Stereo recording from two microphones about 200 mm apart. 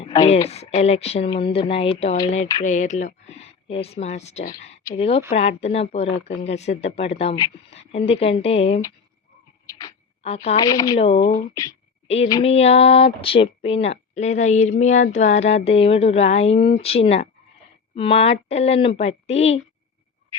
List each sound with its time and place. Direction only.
0.0 s a woman's voice: 25° left (ahead or behind)
0.5 s speech: 30° left (ahead or behind)
9.6 s a sound: 15° left (ahead or behind)
10.2 s speech: 30° left (ahead or behind)
10.6 s speech: 20° left (ahead or behind)
10.9 s speech: 30° left (ahead or behind)
11.5 s speech: 20° left (ahead or behind)
12.0 s a woman's voice: 30° left (ahead or behind)